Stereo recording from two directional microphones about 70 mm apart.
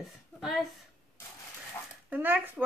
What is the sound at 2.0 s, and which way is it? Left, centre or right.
Speech, right.